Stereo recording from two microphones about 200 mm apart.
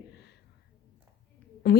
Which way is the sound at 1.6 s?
55° left (ahead or behind).